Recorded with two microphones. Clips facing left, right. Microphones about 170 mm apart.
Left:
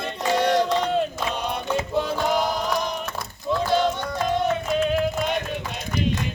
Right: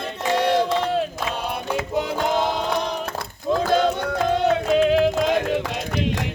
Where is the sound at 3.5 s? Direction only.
60° right (ahead or behind); by 6.2 s 90° right.